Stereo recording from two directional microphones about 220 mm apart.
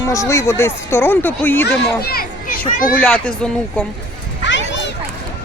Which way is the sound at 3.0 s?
5° left (ahead or behind).